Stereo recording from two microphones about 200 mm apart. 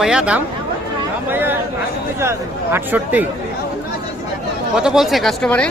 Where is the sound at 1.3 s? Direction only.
10° right (ahead or behind).